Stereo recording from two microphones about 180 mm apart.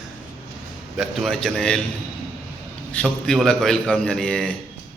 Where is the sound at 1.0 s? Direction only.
Centre (ahead or behind).